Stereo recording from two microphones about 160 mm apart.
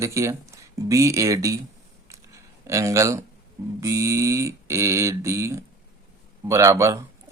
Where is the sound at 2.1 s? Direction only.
20° right (ahead or behind).